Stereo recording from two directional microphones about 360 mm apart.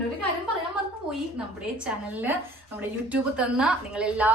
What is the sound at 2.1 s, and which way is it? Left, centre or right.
A woman's voice, centre.